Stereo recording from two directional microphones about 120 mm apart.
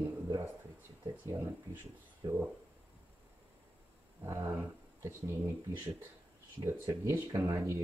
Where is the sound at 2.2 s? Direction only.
35° right (ahead or behind).